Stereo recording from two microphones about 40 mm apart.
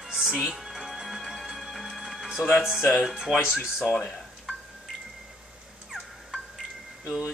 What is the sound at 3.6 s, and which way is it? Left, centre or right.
Speech, centre.